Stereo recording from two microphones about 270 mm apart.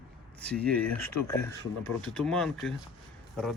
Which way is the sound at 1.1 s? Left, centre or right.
Left.